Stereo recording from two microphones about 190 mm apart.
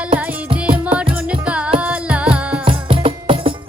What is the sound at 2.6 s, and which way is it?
Music, 30° right (ahead or behind).